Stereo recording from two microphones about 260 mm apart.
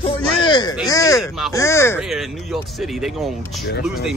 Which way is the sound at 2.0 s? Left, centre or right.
Centre.